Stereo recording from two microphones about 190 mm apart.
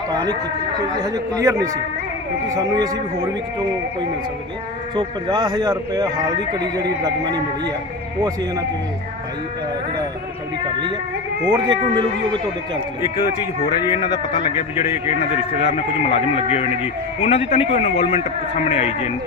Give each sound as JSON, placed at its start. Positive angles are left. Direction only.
{"t": 0.1, "sound": "speech", "side_deg": -20}
{"t": 1.4, "sound": "a man's voice", "side_deg": -15}
{"t": 4.9, "sound": "speech", "side_deg": -20}
{"t": 11.4, "sound": "speech", "side_deg": -25}
{"t": 13.1, "sound": "a man's voice", "side_deg": 35}